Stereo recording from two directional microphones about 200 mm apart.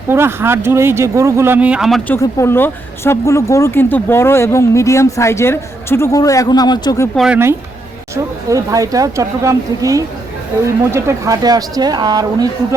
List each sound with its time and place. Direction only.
0.1 s speech: 10° right (ahead or behind)
2.0 s speech: 15° left (ahead or behind)
7.2 s speech: 10° right (ahead or behind)